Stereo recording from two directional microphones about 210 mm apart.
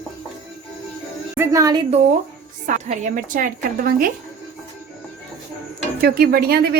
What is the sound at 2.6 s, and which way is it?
A woman's voice, 35° right (ahead or behind).